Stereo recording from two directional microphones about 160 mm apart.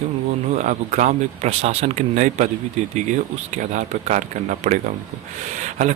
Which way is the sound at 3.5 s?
50° right (ahead or behind).